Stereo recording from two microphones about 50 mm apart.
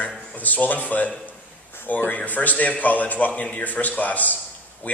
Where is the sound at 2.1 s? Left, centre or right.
Left.